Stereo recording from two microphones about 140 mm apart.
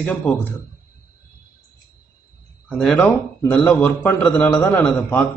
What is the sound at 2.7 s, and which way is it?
Speech, 10° left (ahead or behind).